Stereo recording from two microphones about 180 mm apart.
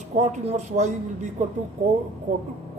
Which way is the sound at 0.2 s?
40° right (ahead or behind).